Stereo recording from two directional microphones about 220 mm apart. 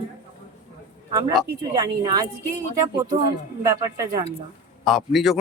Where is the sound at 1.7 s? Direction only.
20° right (ahead or behind).